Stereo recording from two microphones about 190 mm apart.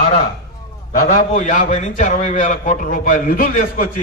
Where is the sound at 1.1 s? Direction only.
40° left (ahead or behind).